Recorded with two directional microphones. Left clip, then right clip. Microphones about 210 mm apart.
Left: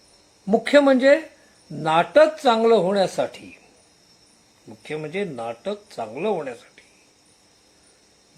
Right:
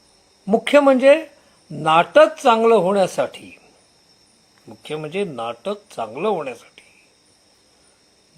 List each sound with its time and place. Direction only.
0.7 s speech: 20° right (ahead or behind)
4.9 s speech: 20° right (ahead or behind)